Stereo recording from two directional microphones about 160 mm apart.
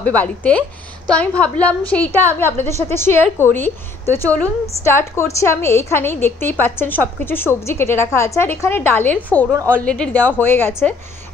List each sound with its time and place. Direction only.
0.0 s a woman's voice: 10° left (ahead or behind)